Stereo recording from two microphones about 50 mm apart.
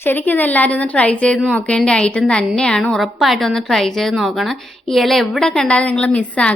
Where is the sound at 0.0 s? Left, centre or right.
Left; by 2.9 s centre.